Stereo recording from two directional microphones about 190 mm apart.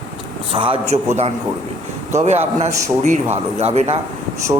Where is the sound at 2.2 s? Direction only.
35° right (ahead or behind).